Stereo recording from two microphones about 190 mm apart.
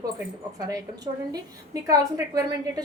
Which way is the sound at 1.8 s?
20° right (ahead or behind).